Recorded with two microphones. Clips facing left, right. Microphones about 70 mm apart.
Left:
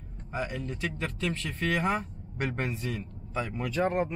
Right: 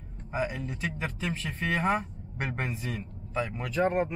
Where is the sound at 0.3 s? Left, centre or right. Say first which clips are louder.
Right 2 dB; centre.